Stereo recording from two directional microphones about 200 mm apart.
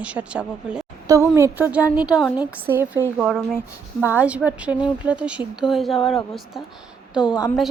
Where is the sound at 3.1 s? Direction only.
Centre (ahead or behind).